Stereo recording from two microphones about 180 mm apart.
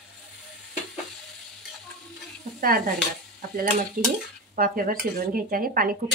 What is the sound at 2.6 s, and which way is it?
Speech, 55° right (ahead or behind).